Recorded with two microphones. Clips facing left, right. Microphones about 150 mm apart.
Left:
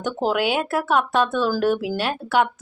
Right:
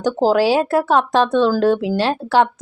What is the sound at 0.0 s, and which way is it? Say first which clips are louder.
Speech: right 7 dB; 30° right (ahead or behind).